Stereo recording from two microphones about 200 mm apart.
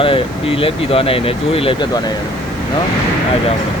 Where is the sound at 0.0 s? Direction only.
25° left (ahead or behind).